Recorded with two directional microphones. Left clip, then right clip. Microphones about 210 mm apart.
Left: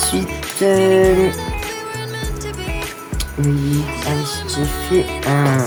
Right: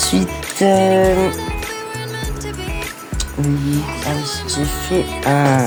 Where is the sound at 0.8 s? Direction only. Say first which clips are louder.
Left 3 dB; centre (ahead or behind).